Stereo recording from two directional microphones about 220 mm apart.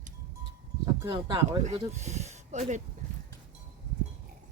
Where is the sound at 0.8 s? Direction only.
20° right (ahead or behind).